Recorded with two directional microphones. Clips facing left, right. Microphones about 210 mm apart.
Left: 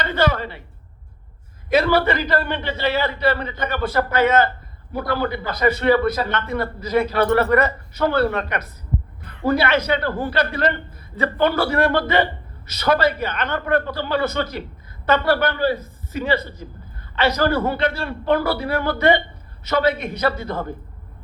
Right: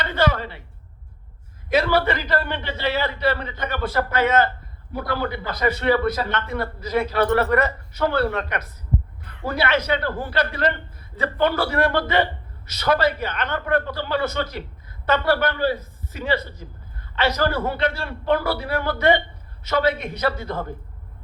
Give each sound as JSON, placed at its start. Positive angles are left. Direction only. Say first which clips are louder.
{"t": 1.7, "sound": "a man's voice", "louder": "left 2 dB", "side_deg": 50}